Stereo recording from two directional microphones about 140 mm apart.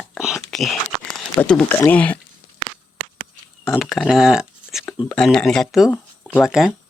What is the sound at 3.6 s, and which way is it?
Speech, centre (ahead or behind).